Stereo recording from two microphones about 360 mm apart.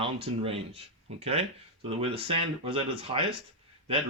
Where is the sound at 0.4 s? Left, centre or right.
Centre.